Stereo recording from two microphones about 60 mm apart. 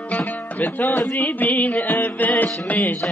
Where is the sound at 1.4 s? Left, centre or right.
Left.